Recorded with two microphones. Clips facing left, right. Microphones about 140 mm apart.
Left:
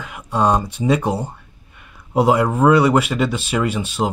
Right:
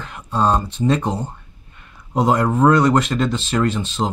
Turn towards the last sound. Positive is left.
turn(degrees=10)  # may be behind; listen again after turning